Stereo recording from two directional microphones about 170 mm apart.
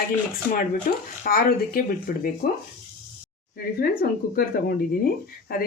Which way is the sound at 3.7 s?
60° left (ahead or behind).